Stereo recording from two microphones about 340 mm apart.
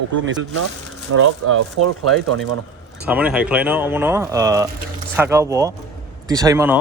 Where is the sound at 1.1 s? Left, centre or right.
Right.